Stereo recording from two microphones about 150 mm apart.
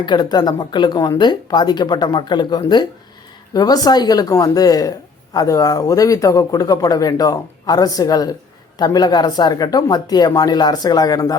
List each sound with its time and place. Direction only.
0.0 s a woman's voice: 30° left (ahead or behind)